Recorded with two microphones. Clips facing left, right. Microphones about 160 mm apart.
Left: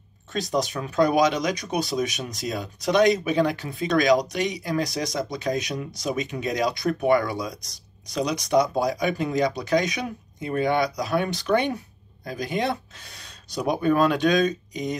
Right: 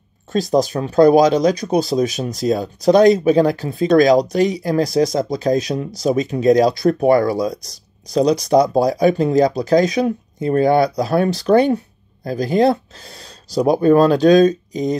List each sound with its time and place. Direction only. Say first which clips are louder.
0.3 s speech: right 9 dB; 35° right (ahead or behind)